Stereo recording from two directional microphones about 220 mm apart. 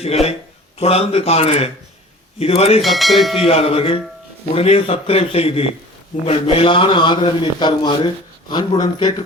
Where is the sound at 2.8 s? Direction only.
Centre (ahead or behind).